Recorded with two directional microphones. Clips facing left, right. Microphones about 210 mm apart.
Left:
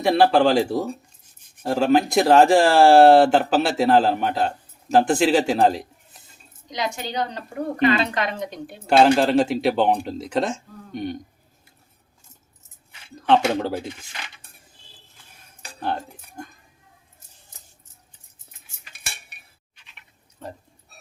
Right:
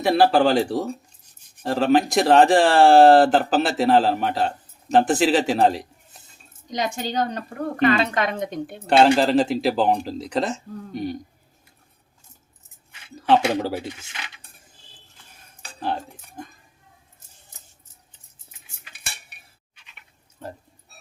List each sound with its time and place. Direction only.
0.0 s speech: centre (ahead or behind)
6.7 s speech: 45° right (ahead or behind)
8.9 s speech: centre (ahead or behind)
13.1 s speech: 5° right (ahead or behind)
15.8 s speech: centre (ahead or behind)